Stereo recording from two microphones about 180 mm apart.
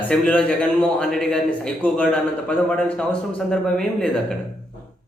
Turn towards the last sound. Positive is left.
turn(degrees=5)  # may be behind; listen again after turning